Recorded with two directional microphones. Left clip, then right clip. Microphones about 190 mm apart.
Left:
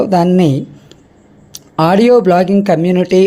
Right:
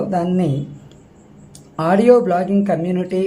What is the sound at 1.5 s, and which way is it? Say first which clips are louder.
Speech: left 6 dB; 35° left (ahead or behind).